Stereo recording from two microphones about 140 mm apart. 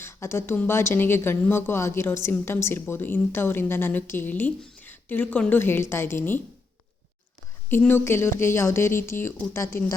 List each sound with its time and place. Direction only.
0.0 s speech: 20° left (ahead or behind)
7.7 s speech: 15° left (ahead or behind)